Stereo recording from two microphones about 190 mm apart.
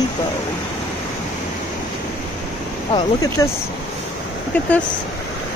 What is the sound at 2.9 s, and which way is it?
Speech, 20° left (ahead or behind).